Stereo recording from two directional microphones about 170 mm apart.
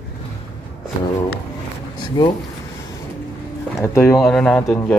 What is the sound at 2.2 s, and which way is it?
Speech, 25° left (ahead or behind).